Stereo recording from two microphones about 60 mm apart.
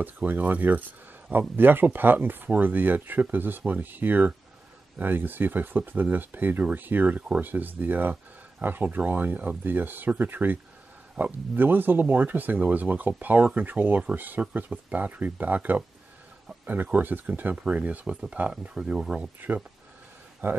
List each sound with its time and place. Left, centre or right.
0.0 s speech: right
20.4 s speech: right